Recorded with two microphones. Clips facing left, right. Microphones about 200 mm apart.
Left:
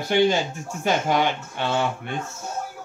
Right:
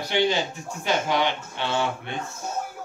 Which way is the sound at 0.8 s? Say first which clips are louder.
Left 2 dB; 50° left (ahead or behind).